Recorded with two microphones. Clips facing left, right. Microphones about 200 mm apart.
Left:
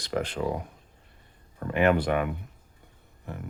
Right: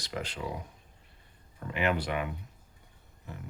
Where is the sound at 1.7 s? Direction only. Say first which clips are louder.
Left 7 dB; 50° left (ahead or behind).